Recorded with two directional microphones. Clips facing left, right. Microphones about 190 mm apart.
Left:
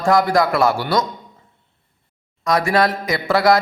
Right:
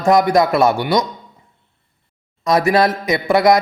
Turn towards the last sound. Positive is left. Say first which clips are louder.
# right 3 dB
turn(degrees=-20)  # may be behind; listen again after turning